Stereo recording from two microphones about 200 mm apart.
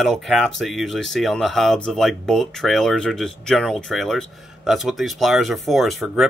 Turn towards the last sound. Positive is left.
turn(degrees=0)  # may be behind; listen again after turning